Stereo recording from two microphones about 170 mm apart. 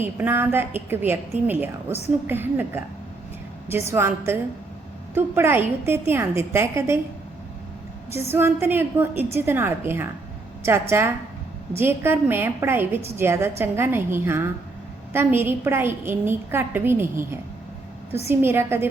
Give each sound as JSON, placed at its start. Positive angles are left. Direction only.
{"t": 0.0, "sound": "a woman's voice", "side_deg": -10}
{"t": 5.1, "sound": "a woman's voice", "side_deg": -15}
{"t": 8.1, "sound": "a woman's voice", "side_deg": -15}
{"t": 18.3, "sound": "a woman's voice", "side_deg": -15}